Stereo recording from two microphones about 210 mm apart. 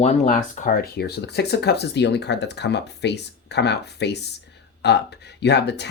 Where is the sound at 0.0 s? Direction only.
35° left (ahead or behind).